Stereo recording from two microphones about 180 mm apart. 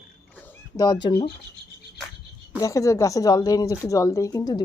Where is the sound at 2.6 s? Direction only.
20° left (ahead or behind).